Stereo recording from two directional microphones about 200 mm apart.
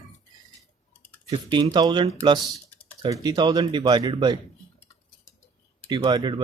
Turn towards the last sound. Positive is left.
turn(degrees=-20)  # may be behind; listen again after turning